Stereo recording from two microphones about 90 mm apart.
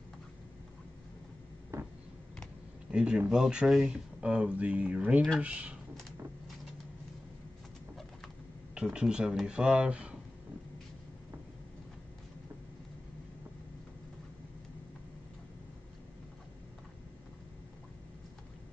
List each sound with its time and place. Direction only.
1.7 s a sound: 30° right (ahead or behind)
2.9 s speech: 10° right (ahead or behind)
8.7 s speech: 10° right (ahead or behind)